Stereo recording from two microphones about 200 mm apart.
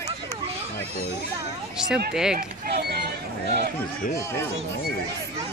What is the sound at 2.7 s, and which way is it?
Speech, 55° right (ahead or behind).